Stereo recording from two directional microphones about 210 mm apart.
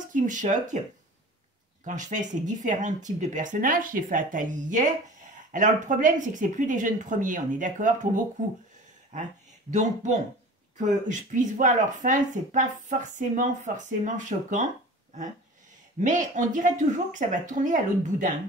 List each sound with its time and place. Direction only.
0.1 s speech: 35° right (ahead or behind)
1.9 s speech: 35° right (ahead or behind)
9.7 s speech: 35° right (ahead or behind)
16.0 s speech: 35° right (ahead or behind)